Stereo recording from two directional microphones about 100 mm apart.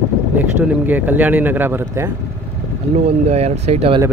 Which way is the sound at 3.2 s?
90° right.